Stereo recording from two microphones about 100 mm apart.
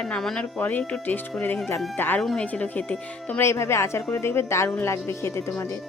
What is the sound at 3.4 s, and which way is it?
Speech, 25° left (ahead or behind).